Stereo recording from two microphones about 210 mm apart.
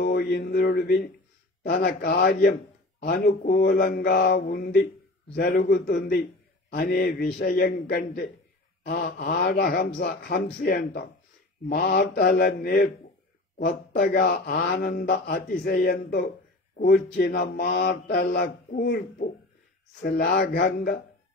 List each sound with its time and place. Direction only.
0.0 s a man's voice: 45° left (ahead or behind)
20.2 s a man's voice: 40° left (ahead or behind)